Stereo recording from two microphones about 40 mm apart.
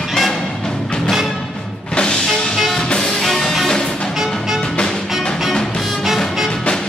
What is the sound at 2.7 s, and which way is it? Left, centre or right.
Music, centre.